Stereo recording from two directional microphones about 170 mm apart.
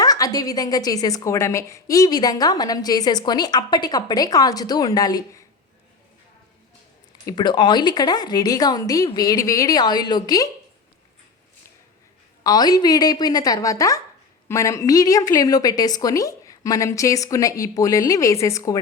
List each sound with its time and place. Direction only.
0.0 s a woman's voice: 20° left (ahead or behind)
7.3 s a woman's voice: 25° left (ahead or behind)
12.4 s a woman's voice: 25° left (ahead or behind)